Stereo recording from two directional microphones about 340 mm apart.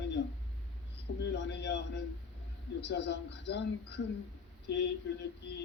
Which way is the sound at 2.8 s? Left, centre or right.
Left.